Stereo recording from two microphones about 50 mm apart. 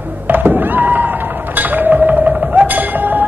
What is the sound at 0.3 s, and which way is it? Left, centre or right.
Thunk, right.